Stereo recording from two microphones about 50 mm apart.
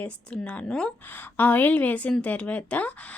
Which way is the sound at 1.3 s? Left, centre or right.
Left.